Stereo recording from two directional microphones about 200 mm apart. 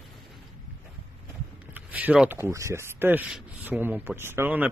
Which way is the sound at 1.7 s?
10° right (ahead or behind).